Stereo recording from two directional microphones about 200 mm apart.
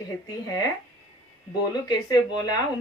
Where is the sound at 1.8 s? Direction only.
20° left (ahead or behind).